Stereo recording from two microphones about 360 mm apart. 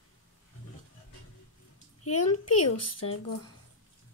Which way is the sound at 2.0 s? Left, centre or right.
Left.